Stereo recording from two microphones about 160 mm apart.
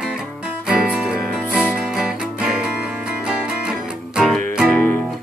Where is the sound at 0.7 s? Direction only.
5° right (ahead or behind).